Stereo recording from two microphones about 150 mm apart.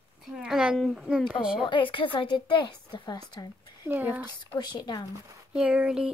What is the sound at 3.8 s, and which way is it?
Speech, 10° right (ahead or behind).